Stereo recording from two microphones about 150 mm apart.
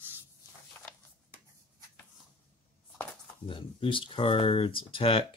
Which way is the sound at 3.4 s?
35° left (ahead or behind).